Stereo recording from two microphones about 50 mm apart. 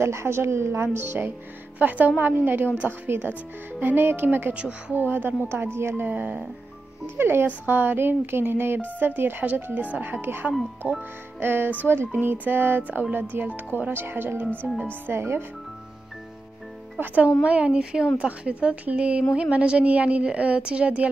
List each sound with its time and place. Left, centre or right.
0.0 s a woman's voice: right
1.8 s a woman's voice: right
4.6 s a woman's voice: right
4.9 s a woman's voice: right
5.5 s a woman's voice: right
6.0 s a woman's voice: right
7.2 s speech: right
7.4 s a woman's voice: right
10.2 s speech: right
10.8 s a woman's voice: right
11.4 s a woman's voice: right
17.0 s a woman's voice: right